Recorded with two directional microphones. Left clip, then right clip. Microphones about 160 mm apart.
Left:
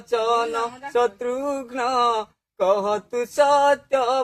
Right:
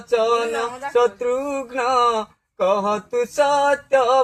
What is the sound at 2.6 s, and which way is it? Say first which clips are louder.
Mantra: right 1 dB; 40° left (ahead or behind).